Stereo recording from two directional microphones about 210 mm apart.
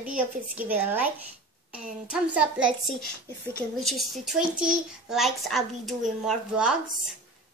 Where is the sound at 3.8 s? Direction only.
Centre (ahead or behind).